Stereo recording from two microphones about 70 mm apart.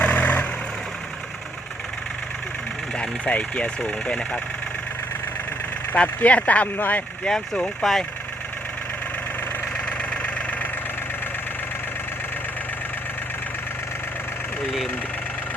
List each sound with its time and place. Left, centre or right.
0.0 s vehicle: left
3.0 s speech: centre
5.9 s speech: centre
7.3 s speech: centre